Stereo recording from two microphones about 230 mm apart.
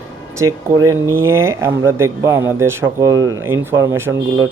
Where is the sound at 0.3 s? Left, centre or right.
Centre.